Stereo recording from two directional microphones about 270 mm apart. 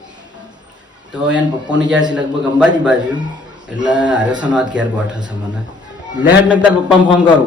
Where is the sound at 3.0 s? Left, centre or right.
Centre.